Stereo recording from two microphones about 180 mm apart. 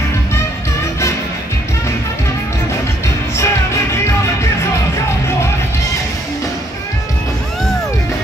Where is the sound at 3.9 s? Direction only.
15° left (ahead or behind).